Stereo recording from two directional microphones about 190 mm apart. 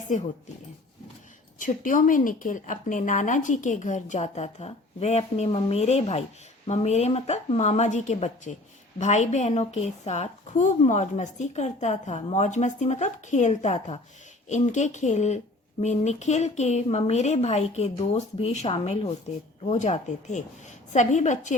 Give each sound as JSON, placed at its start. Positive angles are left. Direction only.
{"t": 1.5, "sound": "a woman's voice", "side_deg": 45}